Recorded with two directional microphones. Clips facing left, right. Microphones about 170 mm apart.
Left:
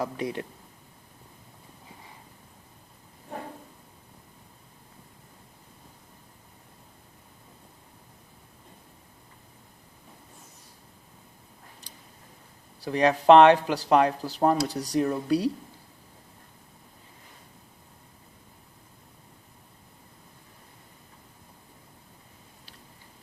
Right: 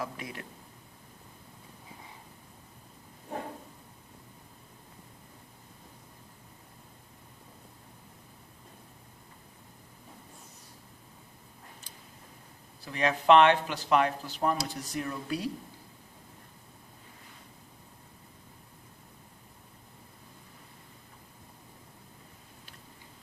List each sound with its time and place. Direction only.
0.0 s speech: 35° left (ahead or behind)
12.8 s speech: 35° left (ahead or behind)